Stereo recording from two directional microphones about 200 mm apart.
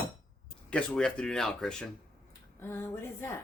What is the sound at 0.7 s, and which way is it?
Speech, 5° left (ahead or behind).